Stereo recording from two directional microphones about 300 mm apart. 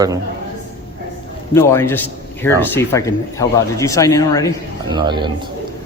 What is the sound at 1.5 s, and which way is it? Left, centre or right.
A man's voice, centre.